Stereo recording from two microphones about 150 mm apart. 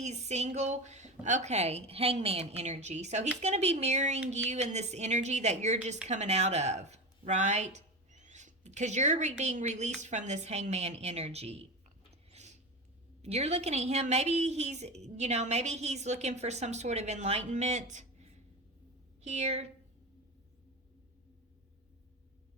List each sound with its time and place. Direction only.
0.0 s a woman's voice: 50° right (ahead or behind)
12.3 s a sound: 50° right (ahead or behind)
13.2 s a woman's voice: 45° right (ahead or behind)